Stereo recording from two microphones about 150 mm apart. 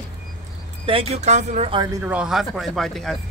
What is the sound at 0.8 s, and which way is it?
Speech, 40° right (ahead or behind).